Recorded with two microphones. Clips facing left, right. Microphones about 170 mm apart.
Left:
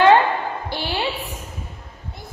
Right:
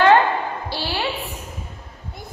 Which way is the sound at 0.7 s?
15° left (ahead or behind).